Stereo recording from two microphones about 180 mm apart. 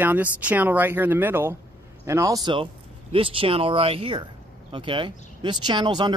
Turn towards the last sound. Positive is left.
turn(degrees=-25)  # may be behind; listen again after turning